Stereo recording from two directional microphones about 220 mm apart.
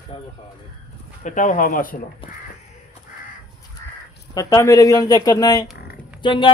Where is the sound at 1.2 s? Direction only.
35° left (ahead or behind).